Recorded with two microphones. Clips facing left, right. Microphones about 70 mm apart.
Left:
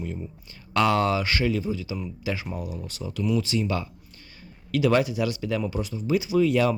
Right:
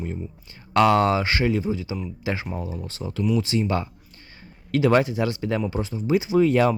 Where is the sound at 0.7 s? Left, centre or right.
Right.